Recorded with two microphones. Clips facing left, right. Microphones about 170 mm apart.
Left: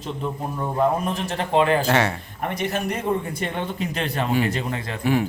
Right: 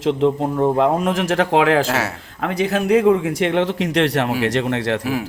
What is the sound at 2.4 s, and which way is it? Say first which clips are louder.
A man's voice: right 7 dB; 90° right.